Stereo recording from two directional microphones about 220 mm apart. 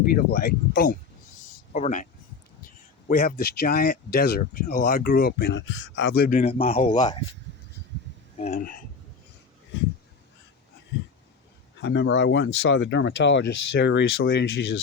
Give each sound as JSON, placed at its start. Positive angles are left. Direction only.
{"t": 0.3, "sound": "speech", "side_deg": 45}
{"t": 3.1, "sound": "speech", "side_deg": 40}
{"t": 6.4, "sound": "a man's voice", "side_deg": 25}
{"t": 8.4, "sound": "speech", "side_deg": 35}
{"t": 11.8, "sound": "speech", "side_deg": 55}